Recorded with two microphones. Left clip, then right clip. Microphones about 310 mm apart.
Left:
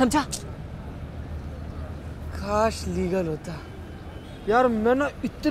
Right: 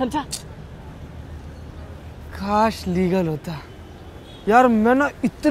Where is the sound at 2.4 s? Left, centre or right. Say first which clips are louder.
Right 4 dB; right.